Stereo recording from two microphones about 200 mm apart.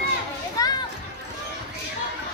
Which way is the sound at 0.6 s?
15° left (ahead or behind).